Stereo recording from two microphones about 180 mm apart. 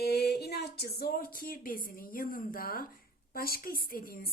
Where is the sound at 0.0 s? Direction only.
60° left (ahead or behind).